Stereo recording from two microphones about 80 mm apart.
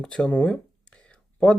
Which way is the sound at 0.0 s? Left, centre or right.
Centre.